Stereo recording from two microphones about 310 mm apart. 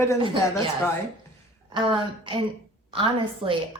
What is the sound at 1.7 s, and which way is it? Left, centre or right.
A woman's voice, centre.